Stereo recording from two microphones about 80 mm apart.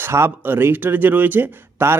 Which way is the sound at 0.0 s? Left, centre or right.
Right.